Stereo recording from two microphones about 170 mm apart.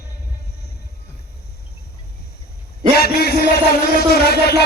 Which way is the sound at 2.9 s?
70° left (ahead or behind).